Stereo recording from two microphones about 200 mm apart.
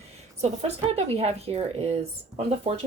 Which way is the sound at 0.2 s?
30° right (ahead or behind).